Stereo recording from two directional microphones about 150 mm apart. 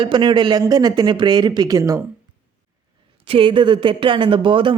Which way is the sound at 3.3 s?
35° right (ahead or behind).